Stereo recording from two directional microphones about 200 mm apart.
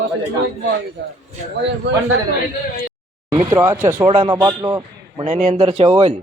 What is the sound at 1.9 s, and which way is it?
Speech, 60° right (ahead or behind).